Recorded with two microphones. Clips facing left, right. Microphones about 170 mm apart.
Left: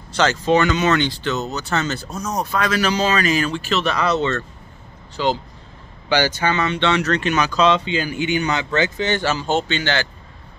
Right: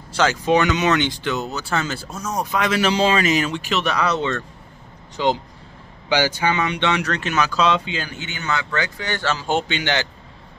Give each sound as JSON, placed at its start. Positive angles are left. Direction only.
{"t": 0.1, "sound": "speech", "side_deg": -10}
{"t": 8.0, "sound": "a man's voice", "side_deg": 10}
{"t": 9.4, "sound": "speech", "side_deg": -15}